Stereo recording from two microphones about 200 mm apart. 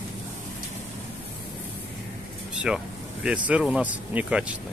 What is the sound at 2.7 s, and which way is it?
Speech, 5° right (ahead or behind).